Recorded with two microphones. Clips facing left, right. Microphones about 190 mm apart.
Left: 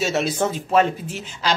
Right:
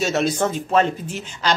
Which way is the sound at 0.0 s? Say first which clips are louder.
Right 1 dB; 5° left (ahead or behind).